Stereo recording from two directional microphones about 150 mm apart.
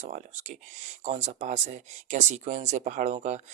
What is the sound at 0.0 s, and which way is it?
Speech, 50° right (ahead or behind).